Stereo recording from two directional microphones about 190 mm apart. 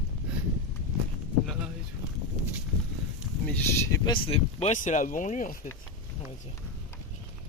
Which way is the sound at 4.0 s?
25° left (ahead or behind).